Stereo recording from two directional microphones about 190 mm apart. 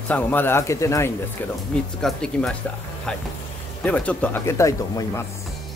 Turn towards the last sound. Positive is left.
turn(degrees=15)  # may be behind; listen again after turning